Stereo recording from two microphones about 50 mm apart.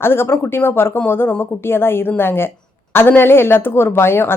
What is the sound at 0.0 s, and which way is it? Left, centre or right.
Speech, left.